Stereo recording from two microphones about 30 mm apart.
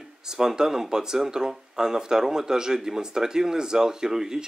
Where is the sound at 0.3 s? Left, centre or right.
Centre.